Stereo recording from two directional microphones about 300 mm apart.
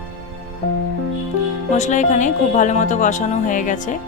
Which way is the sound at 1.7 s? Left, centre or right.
Left.